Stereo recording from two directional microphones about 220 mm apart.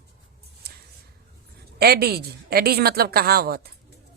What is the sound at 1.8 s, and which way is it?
A woman's voice, 45° right (ahead or behind).